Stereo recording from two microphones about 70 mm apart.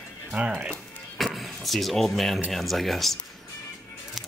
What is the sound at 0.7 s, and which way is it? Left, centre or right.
Music, centre.